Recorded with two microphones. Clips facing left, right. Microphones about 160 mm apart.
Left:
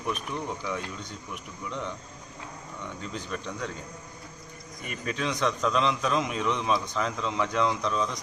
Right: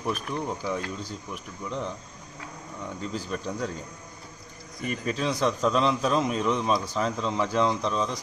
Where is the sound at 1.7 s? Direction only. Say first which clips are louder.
Right 3 dB; 35° right (ahead or behind).